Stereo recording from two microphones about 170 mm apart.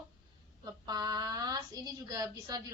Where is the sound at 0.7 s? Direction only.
25° right (ahead or behind).